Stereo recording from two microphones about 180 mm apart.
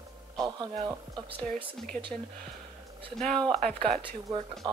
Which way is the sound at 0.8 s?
25° right (ahead or behind).